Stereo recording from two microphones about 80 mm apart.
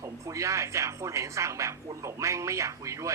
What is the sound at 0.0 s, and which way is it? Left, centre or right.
A man's voice, right.